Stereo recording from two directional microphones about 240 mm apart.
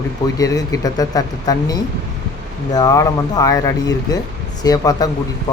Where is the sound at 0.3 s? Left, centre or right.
Centre.